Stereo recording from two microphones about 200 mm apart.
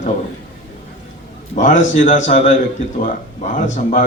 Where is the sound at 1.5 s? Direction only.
40° left (ahead or behind).